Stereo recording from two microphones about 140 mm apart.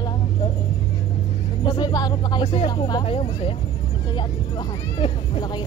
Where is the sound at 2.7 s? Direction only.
30° left (ahead or behind).